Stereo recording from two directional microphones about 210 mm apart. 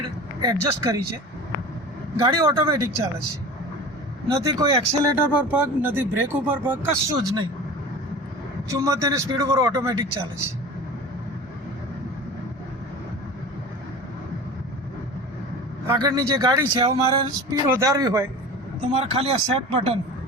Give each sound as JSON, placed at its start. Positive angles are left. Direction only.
{"t": 0.0, "sound": "vehicle", "side_deg": -20}
{"t": 2.2, "sound": "speech", "side_deg": -20}
{"t": 4.4, "sound": "speech", "side_deg": -15}
{"t": 8.7, "sound": "speech", "side_deg": -15}
{"t": 15.9, "sound": "speech", "side_deg": -20}
{"t": 18.8, "sound": "speech", "side_deg": -25}